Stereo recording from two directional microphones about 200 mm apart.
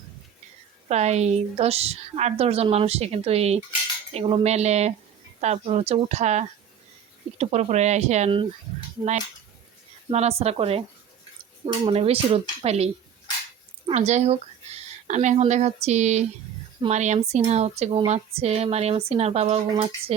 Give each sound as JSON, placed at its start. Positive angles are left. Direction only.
{"t": 0.9, "sound": "speech", "side_deg": -35}
{"t": 10.1, "sound": "speech", "side_deg": -30}